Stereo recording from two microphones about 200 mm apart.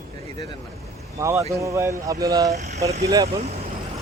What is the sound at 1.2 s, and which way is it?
Speech, 15° right (ahead or behind).